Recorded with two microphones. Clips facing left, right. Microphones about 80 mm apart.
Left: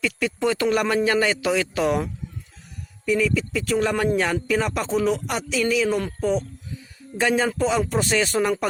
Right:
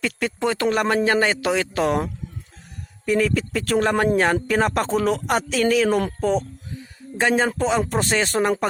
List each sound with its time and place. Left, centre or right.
0.0 s speech: right
3.1 s speech: right
7.2 s speech: right